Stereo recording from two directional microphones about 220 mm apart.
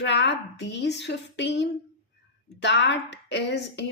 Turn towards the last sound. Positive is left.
turn(degrees=50)  # may be behind; listen again after turning